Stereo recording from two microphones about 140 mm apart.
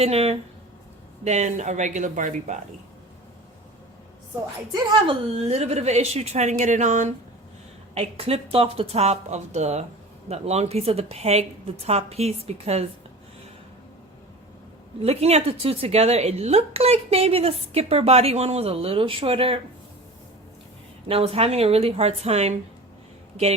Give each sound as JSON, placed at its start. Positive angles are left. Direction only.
{"t": 0.0, "sound": "speech", "side_deg": -50}
{"t": 5.3, "sound": "speech", "side_deg": -45}
{"t": 7.9, "sound": "speech", "side_deg": -45}
{"t": 15.0, "sound": "speech", "side_deg": -50}
{"t": 21.1, "sound": "speech", "side_deg": -45}